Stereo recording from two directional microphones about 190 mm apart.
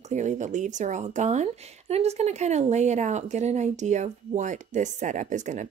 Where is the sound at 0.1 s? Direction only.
40° right (ahead or behind).